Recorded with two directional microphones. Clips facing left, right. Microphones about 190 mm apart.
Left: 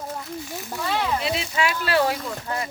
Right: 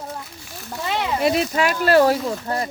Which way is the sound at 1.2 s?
50° right (ahead or behind).